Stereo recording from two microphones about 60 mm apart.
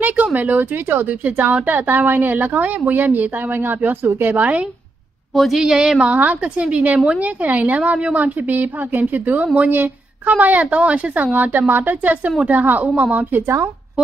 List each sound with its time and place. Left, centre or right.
0.0 s a woman's voice: right
4.4 s a woman's voice: right
5.3 s a woman's voice: centre
6.1 s a woman's voice: right